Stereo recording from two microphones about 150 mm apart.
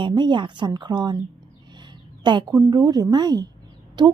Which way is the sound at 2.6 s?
25° right (ahead or behind).